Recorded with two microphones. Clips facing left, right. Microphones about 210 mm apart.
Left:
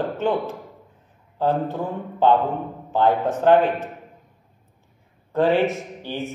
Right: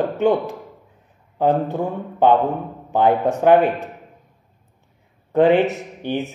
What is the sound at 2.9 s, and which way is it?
Speech, 15° right (ahead or behind).